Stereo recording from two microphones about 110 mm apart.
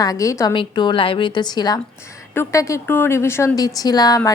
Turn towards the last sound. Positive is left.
turn(degrees=35)  # may be behind; listen again after turning